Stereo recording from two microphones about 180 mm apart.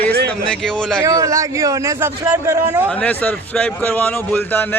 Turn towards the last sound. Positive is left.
turn(degrees=10)  # may be behind; listen again after turning